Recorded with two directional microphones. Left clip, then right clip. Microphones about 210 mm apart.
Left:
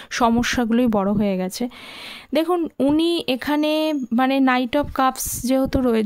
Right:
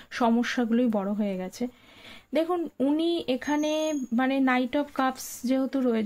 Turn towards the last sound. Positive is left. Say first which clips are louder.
# left 7 dB
turn(degrees=45)  # may be behind; listen again after turning